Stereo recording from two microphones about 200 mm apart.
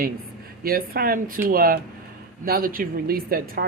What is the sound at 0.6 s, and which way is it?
Speech, 50° right (ahead or behind).